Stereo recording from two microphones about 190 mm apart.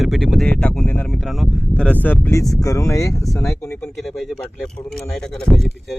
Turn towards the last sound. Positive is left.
turn(degrees=0)  # may be behind; listen again after turning